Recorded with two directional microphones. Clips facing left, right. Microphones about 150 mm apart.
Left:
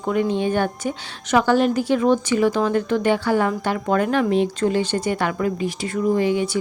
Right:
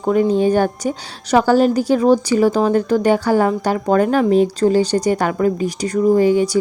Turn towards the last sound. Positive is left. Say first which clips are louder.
# right 6 dB
turn(degrees=-40)  # may be behind; listen again after turning